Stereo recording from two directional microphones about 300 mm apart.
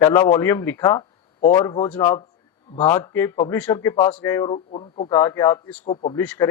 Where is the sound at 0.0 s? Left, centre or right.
Centre.